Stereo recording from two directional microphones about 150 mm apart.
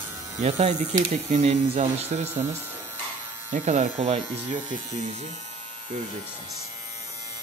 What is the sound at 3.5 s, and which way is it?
Speech, 50° right (ahead or behind).